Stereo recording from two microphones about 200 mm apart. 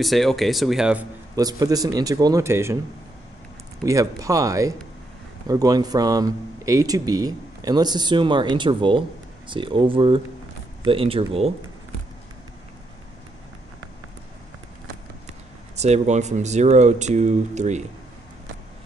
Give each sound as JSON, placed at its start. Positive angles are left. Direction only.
{"t": 0.0, "sound": "speech", "side_deg": 0}
{"t": 1.3, "sound": "speech", "side_deg": -20}
{"t": 3.8, "sound": "speech", "side_deg": -15}
{"t": 15.8, "sound": "speech", "side_deg": -35}